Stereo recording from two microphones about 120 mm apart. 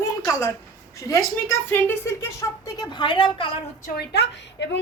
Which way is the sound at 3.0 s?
40° left (ahead or behind).